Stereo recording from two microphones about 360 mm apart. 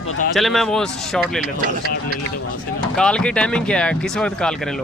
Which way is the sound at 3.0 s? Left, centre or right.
Centre.